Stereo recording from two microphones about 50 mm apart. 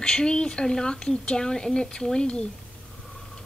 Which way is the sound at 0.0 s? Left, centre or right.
Centre.